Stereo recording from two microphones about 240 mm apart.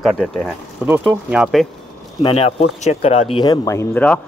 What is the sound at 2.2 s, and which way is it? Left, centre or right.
Speech, left.